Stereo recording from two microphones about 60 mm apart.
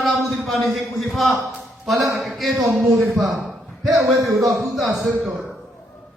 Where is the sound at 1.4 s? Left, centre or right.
Right.